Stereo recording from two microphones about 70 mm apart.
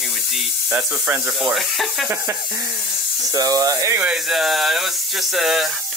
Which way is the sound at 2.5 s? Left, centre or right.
Right.